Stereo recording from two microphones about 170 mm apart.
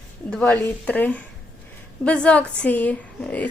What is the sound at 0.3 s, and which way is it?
A woman's voice, 5° left (ahead or behind).